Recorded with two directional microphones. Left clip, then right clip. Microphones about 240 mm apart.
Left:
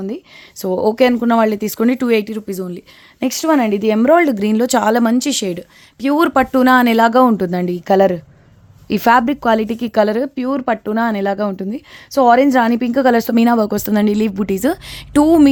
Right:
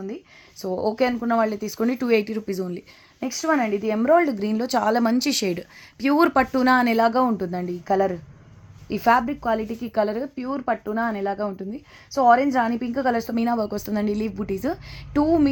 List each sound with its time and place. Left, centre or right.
0.6 s speech: left
1.3 s speech: left
1.8 s speech: left
3.2 s speech: left